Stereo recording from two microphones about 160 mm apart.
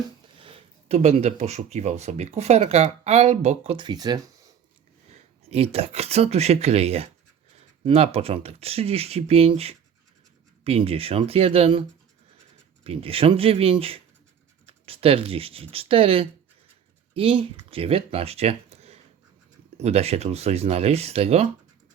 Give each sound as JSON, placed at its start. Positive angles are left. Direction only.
{"t": 0.3, "sound": "speech", "side_deg": -35}
{"t": 5.5, "sound": "speech", "side_deg": -40}
{"t": 12.8, "sound": "speech", "side_deg": -35}